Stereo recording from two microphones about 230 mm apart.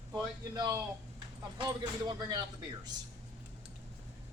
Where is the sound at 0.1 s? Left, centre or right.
Centre.